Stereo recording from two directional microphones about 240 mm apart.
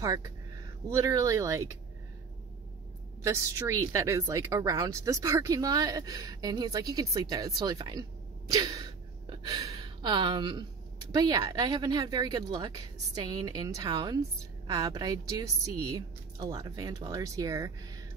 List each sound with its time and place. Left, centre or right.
0.0 s a woman's voice: centre
3.3 s a woman's voice: centre